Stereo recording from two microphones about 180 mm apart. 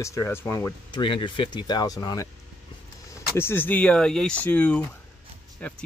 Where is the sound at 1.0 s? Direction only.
30° left (ahead or behind).